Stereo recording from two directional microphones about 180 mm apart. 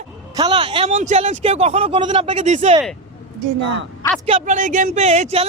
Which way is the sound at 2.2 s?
40° right (ahead or behind).